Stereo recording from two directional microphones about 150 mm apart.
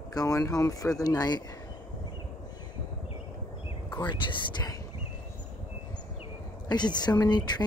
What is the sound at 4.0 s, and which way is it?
Speech, 30° left (ahead or behind).